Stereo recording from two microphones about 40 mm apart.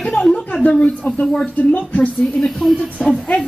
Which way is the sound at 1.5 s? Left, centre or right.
Left.